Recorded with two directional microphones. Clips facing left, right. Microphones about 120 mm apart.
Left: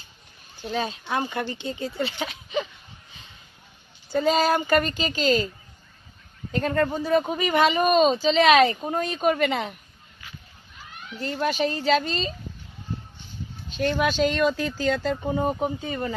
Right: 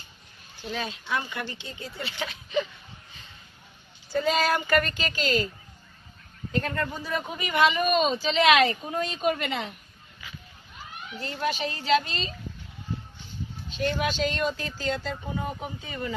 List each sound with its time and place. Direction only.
0.7 s speech: 35° left (ahead or behind); by 2.6 s 20° left (ahead or behind)
4.1 s a woman's voice: 30° left (ahead or behind)
6.6 s speech: 40° left (ahead or behind)
11.2 s speech: 50° left (ahead or behind)
14.0 s speech: 65° left (ahead or behind); by 16.1 s 45° left (ahead or behind)